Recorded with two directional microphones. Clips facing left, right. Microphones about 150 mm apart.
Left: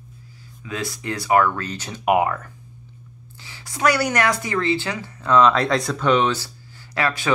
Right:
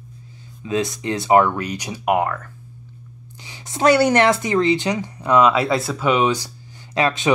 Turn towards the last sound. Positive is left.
turn(degrees=-20)  # may be behind; listen again after turning